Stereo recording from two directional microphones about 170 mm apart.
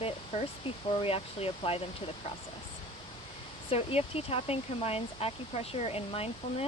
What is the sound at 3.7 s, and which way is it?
Speech, 35° left (ahead or behind).